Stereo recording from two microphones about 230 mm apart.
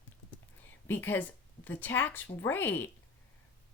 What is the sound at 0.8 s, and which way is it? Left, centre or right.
Speech, centre.